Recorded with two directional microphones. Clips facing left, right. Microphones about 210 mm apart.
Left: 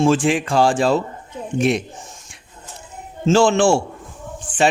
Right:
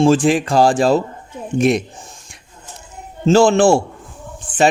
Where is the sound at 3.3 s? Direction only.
40° right (ahead or behind).